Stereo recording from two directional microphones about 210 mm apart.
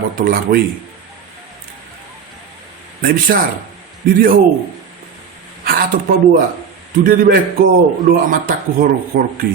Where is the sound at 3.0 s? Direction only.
40° right (ahead or behind).